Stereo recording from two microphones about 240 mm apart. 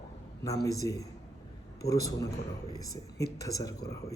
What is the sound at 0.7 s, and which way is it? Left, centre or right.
Speech, centre.